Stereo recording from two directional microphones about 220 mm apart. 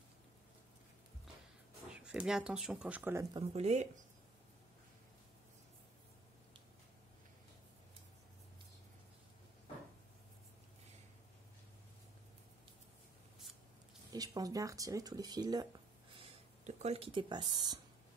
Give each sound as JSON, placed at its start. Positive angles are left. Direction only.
{"t": 2.0, "sound": "speech", "side_deg": -5}
{"t": 3.3, "sound": "speech", "side_deg": -30}
{"t": 14.1, "sound": "speech", "side_deg": -15}